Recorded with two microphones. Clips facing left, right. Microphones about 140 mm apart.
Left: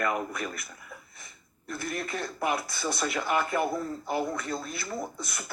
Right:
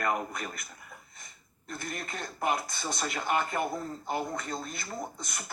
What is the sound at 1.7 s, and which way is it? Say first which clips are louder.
Speech: left 5 dB; 45° right (ahead or behind).